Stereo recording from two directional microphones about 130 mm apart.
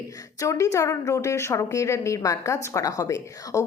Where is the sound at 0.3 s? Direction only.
25° left (ahead or behind).